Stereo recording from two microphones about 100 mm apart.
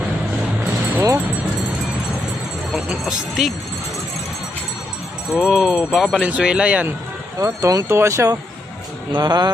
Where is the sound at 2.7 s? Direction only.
5° right (ahead or behind).